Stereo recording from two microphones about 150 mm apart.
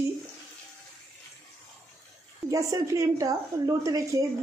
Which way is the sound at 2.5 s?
20° right (ahead or behind).